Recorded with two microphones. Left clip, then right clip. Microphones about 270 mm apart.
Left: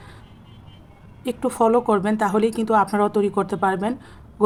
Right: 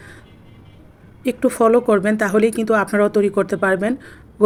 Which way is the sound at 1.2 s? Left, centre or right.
Centre.